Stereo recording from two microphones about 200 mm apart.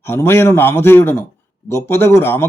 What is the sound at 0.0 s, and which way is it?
A man's voice, 10° left (ahead or behind).